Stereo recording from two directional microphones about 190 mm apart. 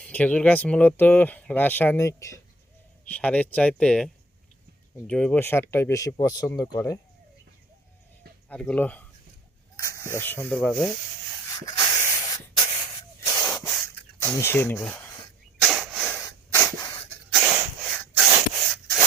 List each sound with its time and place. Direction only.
0.0 s speech: 5° left (ahead or behind)
8.4 s speech: 5° left (ahead or behind)
11.4 s spray: 20° left (ahead or behind)
13.4 s spray: 5° left (ahead or behind)
14.2 s speech: 10° left (ahead or behind)
15.6 s a sound: centre (ahead or behind)
16.2 s spray: 15° left (ahead or behind)
17.8 s sneeze: 5° left (ahead or behind)
18.3 s spray: 15° right (ahead or behind)